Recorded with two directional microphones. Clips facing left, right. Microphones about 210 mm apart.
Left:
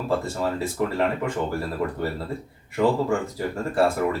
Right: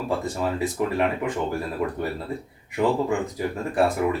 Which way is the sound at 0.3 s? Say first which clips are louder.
Right 1 dB; 15° right (ahead or behind).